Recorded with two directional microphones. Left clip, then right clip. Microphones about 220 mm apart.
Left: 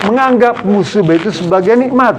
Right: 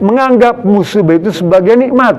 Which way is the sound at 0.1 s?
55° right (ahead or behind).